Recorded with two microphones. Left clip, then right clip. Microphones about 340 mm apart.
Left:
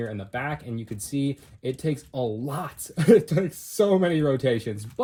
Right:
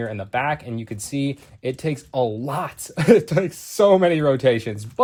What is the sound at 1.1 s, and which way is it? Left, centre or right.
Speech, centre.